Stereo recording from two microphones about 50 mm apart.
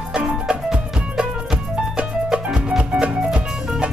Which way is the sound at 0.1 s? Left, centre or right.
Centre.